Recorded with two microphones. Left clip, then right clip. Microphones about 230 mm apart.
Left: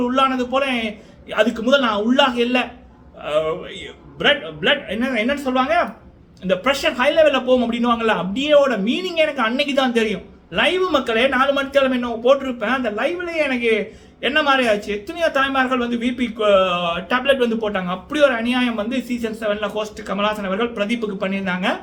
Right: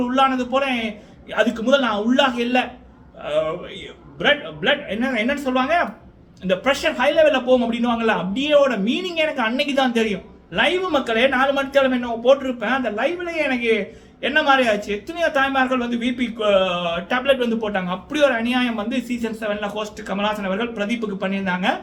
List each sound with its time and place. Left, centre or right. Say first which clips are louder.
0.0 s a man's voice: even; centre